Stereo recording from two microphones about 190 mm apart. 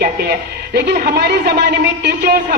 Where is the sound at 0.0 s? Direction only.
55° right (ahead or behind).